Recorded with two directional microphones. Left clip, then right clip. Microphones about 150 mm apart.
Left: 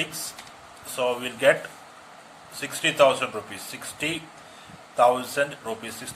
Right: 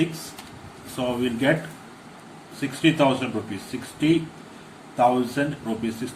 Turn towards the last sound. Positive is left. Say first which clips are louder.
# even
turn(degrees=55)  # may be behind; listen again after turning